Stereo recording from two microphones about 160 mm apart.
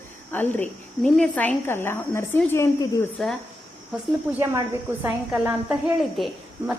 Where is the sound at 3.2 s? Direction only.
5° left (ahead or behind).